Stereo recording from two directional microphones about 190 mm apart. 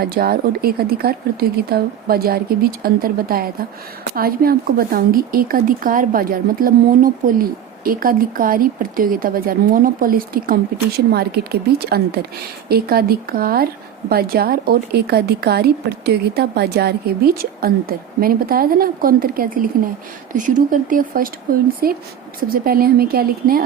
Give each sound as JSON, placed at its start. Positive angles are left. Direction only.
{"t": 0.0, "sound": "a woman's voice", "side_deg": -55}